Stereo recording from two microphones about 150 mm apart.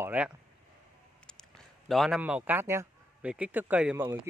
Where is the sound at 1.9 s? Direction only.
Centre (ahead or behind).